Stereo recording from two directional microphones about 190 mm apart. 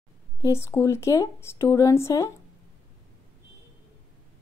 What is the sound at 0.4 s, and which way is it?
A woman's voice, 15° left (ahead or behind).